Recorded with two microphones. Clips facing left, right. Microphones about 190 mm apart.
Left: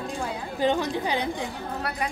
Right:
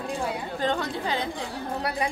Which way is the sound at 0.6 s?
15° left (ahead or behind).